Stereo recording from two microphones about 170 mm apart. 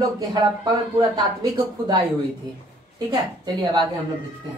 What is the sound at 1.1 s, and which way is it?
Speech, 25° right (ahead or behind).